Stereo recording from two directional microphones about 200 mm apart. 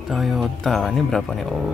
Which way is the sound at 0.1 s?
Centre (ahead or behind).